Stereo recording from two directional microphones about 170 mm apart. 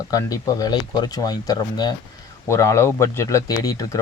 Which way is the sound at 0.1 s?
20° left (ahead or behind).